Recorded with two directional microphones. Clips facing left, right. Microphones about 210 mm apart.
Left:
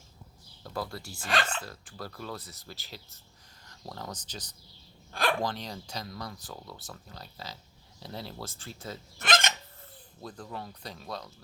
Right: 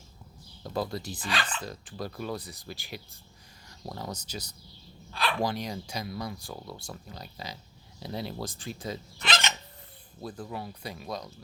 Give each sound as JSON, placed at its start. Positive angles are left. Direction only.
{"t": 0.6, "sound": "speech", "side_deg": -20}
{"t": 1.3, "sound": "speech", "side_deg": 50}
{"t": 1.6, "sound": "speech", "side_deg": -20}
{"t": 9.2, "sound": "a sound", "side_deg": 50}
{"t": 10.2, "sound": "speech", "side_deg": -5}